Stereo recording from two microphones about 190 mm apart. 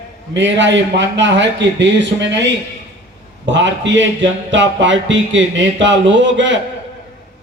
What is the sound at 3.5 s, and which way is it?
A man's voice, 75° right (ahead or behind).